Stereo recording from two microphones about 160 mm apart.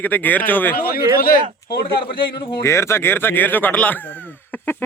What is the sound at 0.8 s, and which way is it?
Speech, 70° left (ahead or behind).